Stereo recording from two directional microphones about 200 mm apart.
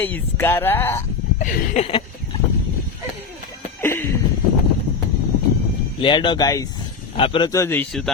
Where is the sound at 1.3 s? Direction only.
40° left (ahead or behind).